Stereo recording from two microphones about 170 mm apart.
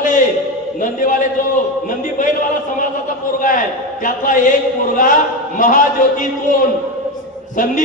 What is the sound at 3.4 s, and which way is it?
A man's voice, 50° left (ahead or behind).